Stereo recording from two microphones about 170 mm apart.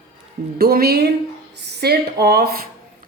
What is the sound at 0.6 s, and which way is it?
Speech, 65° right (ahead or behind).